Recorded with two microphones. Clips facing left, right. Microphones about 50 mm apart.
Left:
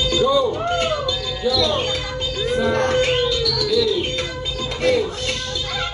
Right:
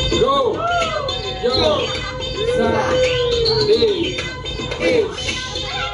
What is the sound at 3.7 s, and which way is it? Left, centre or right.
Music, right.